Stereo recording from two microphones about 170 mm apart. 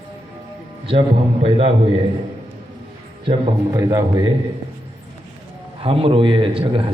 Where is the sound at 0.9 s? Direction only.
35° right (ahead or behind).